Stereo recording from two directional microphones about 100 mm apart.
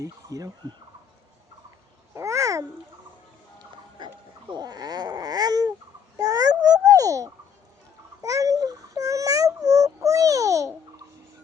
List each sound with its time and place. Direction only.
0.0 s speech: 35° right (ahead or behind)
2.1 s babbling: 30° right (ahead or behind)
3.9 s babbling: 50° right (ahead or behind)
8.2 s a sound: 35° right (ahead or behind)